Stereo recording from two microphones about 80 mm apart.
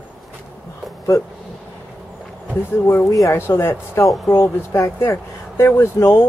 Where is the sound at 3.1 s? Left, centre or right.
Left.